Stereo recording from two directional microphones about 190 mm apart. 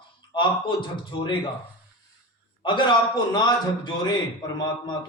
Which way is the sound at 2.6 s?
25° left (ahead or behind).